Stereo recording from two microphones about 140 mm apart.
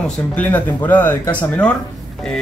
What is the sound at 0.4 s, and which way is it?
Speech, 10° left (ahead or behind).